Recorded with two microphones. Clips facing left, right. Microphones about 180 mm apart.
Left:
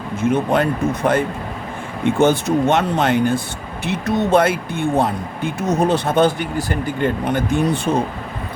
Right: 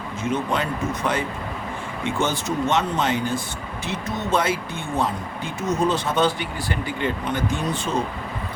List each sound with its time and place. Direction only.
0.2 s speech: 55° left (ahead or behind)